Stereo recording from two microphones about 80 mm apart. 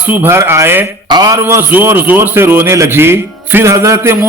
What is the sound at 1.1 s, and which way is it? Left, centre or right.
Speech, right.